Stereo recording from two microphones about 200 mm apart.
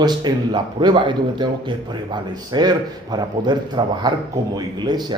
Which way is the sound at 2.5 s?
20° right (ahead or behind).